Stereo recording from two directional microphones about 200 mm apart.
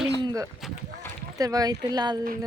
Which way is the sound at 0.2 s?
20° right (ahead or behind).